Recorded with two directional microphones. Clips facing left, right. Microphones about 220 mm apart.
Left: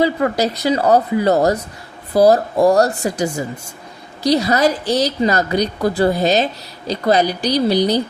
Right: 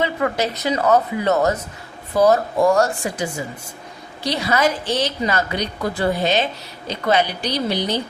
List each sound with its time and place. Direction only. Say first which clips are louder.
0.0 s a woman's voice: left 5 dB; 35° left (ahead or behind)